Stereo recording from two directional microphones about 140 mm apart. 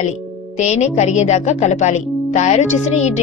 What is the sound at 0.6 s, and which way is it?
Speech, 55° left (ahead or behind).